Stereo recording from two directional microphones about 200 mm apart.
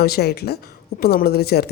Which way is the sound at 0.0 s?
55° left (ahead or behind).